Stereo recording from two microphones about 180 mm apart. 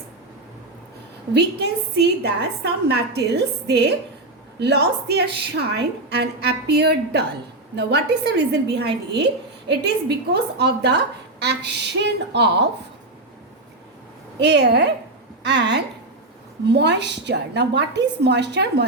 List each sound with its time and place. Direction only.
1.3 s a woman's voice: 70° right (ahead or behind)
14.3 s a woman's voice: 70° right (ahead or behind)